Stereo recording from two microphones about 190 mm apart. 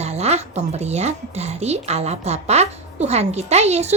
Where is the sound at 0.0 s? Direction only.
35° right (ahead or behind).